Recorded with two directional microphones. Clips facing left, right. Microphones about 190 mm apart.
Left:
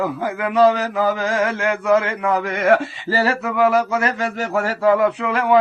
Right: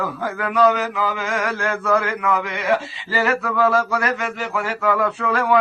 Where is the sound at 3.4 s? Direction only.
15° left (ahead or behind).